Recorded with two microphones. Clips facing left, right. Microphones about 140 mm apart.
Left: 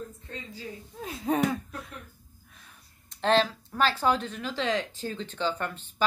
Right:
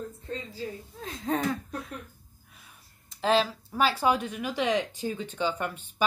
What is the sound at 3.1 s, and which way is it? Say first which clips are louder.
Speech: left 1 dB; 5° right (ahead or behind).